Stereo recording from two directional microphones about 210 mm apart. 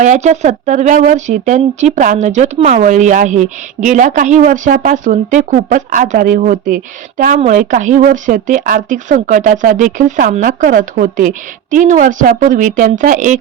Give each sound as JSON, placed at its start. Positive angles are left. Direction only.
{"t": 0.0, "sound": "speech", "side_deg": -35}